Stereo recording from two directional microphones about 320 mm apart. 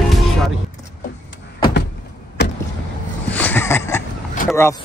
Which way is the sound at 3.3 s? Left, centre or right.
Centre.